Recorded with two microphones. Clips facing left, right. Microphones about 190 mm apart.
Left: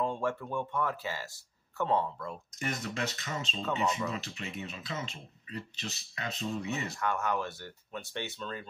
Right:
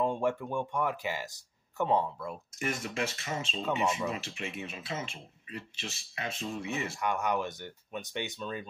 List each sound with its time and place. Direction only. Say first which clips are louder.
0.0 s speech: right 3 dB; 15° right (ahead or behind)
3.0 s speech: right 2 dB; 40° left (ahead or behind)
3.6 s speech: right 1 dB; 15° right (ahead or behind)
4.1 s speech: right 1 dB; 35° left (ahead or behind)
7.0 s speech: right 2 dB; 15° right (ahead or behind)